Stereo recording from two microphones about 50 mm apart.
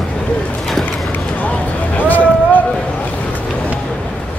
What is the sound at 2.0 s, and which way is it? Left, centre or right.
Vehicle, left.